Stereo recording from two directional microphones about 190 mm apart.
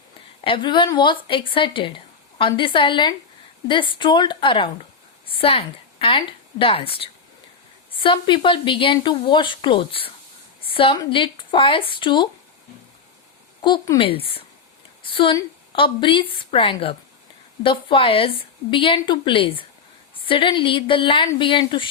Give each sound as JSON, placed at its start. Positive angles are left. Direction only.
{"t": 0.4, "sound": "a woman's voice", "side_deg": 25}
{"t": 13.6, "sound": "a woman's voice", "side_deg": 25}